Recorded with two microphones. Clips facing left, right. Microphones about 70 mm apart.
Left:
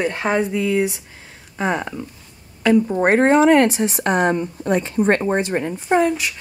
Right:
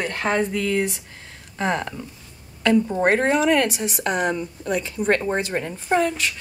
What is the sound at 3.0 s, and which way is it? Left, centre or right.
Speech, left.